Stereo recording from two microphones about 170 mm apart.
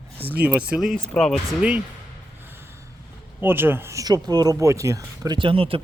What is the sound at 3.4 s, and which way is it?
Speech, 15° right (ahead or behind).